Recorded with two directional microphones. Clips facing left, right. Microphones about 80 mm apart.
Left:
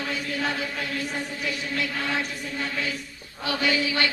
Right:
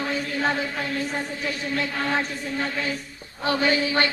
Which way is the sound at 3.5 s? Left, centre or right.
Right.